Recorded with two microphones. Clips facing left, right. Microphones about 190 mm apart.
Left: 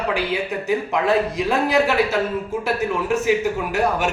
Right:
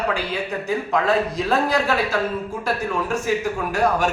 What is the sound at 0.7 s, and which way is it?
A man's voice, 15° left (ahead or behind).